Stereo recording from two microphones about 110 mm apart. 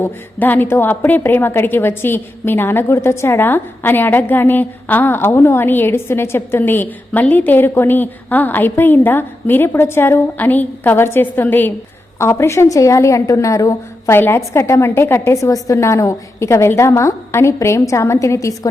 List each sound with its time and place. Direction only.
0.0 s a woman's voice: 15° left (ahead or behind)